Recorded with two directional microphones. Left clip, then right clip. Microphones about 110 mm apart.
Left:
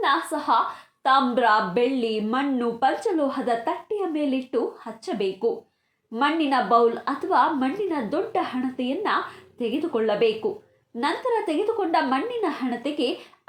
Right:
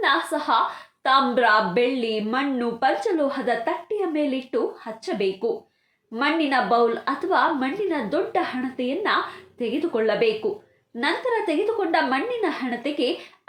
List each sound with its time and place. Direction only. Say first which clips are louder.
0.3 s a woman's voice: right 1 dB; 30° left (ahead or behind)